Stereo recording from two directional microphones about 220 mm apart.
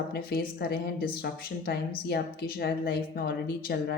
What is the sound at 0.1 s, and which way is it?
A woman's voice, 45° left (ahead or behind).